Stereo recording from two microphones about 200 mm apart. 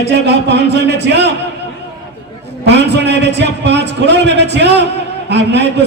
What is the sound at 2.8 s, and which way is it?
A man's voice, 60° right (ahead or behind).